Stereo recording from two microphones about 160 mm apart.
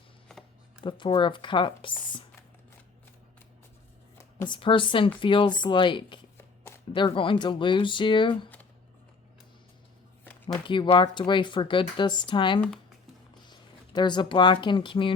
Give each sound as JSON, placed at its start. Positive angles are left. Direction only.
{"t": 0.8, "sound": "speech", "side_deg": 30}
{"t": 4.4, "sound": "speech", "side_deg": 30}
{"t": 10.2, "sound": "a sound", "side_deg": 10}
{"t": 10.7, "sound": "speech", "side_deg": 30}